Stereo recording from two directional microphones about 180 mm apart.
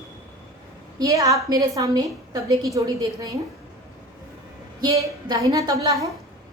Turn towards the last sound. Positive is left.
turn(degrees=-20)  # may be behind; listen again after turning